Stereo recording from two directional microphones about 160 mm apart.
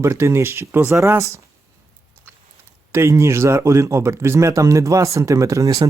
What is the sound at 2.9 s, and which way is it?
Speech, 15° right (ahead or behind).